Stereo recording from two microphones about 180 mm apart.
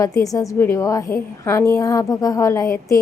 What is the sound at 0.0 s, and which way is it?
A woman's voice, 20° left (ahead or behind).